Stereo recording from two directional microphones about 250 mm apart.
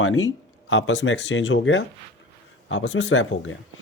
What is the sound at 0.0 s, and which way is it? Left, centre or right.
Speech, left.